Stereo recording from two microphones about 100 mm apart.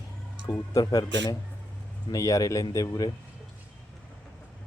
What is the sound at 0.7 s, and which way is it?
Speech, 40° left (ahead or behind).